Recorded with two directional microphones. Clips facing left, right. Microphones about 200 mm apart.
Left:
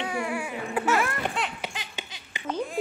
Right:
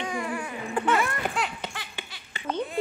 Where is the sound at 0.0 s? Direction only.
10° left (ahead or behind).